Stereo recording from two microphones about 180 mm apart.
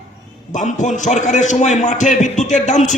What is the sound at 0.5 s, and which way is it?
A man's voice, 45° left (ahead or behind).